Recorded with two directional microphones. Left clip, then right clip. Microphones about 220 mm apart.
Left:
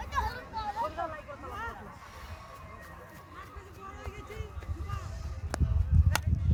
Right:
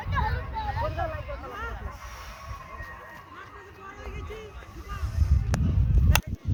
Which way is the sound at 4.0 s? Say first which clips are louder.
Right 4 dB; 50° left (ahead or behind).